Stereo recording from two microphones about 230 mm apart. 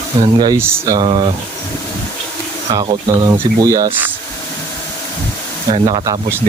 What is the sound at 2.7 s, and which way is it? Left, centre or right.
Speech, centre.